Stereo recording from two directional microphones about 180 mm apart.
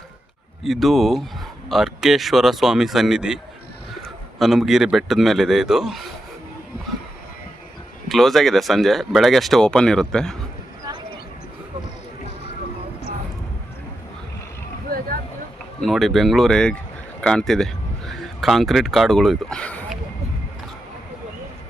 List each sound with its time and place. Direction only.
0.6 s a man's voice: centre (ahead or behind)
8.0 s speech: centre (ahead or behind)
14.8 s a sound: 50° right (ahead or behind)
15.8 s speech: centre (ahead or behind)